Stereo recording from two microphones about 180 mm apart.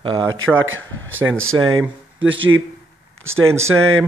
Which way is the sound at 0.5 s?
90° right.